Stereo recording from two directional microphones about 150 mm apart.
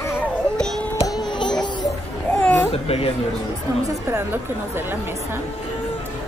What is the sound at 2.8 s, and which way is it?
Speech, 40° left (ahead or behind).